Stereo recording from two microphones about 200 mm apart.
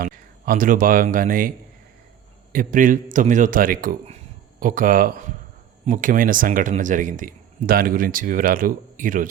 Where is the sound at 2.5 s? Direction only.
40° right (ahead or behind).